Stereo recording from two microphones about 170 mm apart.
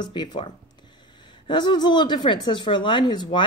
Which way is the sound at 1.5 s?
25° left (ahead or behind).